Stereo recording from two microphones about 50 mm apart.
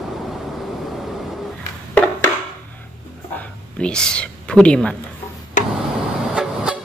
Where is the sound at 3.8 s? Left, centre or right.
Centre.